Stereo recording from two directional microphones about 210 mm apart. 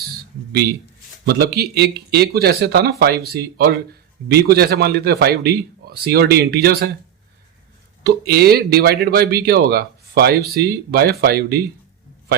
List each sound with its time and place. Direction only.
1.2 s speech: 50° right (ahead or behind)
8.0 s speech: 50° right (ahead or behind)